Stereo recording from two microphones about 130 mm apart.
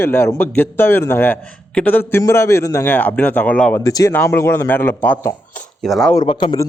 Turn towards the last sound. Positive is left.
turn(degrees=35)  # may be behind; listen again after turning